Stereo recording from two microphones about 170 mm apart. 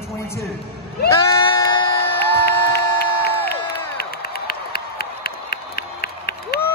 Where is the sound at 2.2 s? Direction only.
70° left (ahead or behind).